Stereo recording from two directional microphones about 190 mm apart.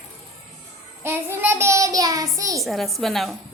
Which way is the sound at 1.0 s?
10° right (ahead or behind).